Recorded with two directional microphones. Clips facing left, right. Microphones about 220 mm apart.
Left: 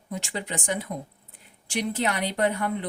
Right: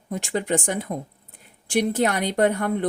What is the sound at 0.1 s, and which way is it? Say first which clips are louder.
A woman's voice: right 8 dB; 50° right (ahead or behind).